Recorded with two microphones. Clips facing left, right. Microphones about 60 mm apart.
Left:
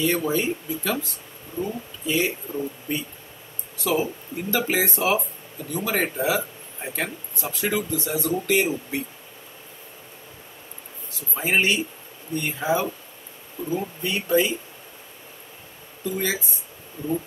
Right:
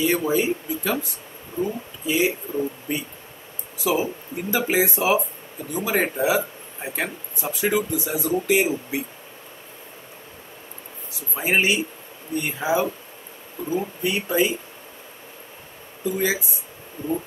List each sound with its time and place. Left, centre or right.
0.0 s speech: centre
11.1 s speech: centre
16.0 s speech: centre